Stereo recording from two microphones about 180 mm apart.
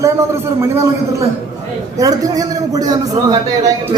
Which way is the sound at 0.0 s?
15° right (ahead or behind).